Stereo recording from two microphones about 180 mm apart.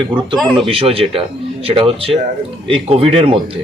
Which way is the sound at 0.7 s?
30° right (ahead or behind).